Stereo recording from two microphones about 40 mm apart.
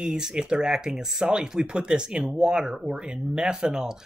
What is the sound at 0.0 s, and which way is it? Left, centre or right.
Speech, centre.